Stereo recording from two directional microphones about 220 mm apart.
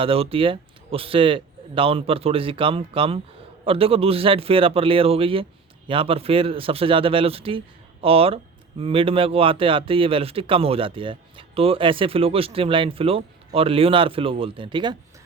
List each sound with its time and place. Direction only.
0.0 s speech: 25° right (ahead or behind)